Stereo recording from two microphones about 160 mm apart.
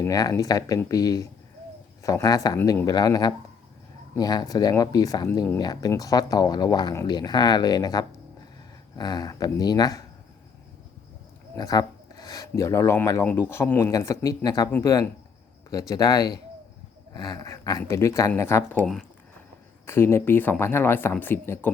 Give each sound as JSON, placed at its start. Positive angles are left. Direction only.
{"t": 0.0, "sound": "speech", "side_deg": 25}
{"t": 11.5, "sound": "speech", "side_deg": 25}